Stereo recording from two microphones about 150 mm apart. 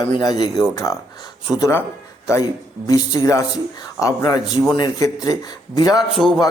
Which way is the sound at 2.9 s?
20° left (ahead or behind).